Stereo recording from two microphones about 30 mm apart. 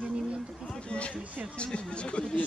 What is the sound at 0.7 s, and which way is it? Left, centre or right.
Speech, left.